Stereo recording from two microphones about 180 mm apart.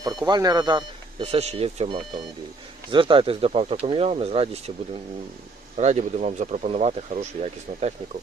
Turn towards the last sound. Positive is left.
turn(degrees=-35)  # may be behind; listen again after turning